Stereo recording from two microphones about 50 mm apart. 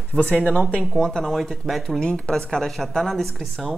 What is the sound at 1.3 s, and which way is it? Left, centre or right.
Speech, centre.